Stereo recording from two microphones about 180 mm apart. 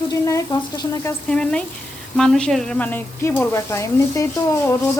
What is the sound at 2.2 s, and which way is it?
Speech, 5° left (ahead or behind).